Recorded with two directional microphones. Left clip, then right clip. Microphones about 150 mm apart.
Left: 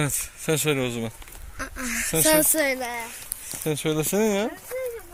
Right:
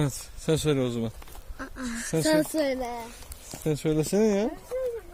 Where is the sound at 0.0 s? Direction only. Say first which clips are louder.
Left 3 dB; 15° right (ahead or behind).